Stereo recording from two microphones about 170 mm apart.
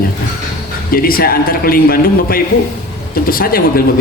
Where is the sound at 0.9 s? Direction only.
60° left (ahead or behind).